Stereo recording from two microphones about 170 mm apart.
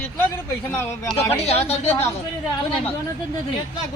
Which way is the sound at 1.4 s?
40° left (ahead or behind).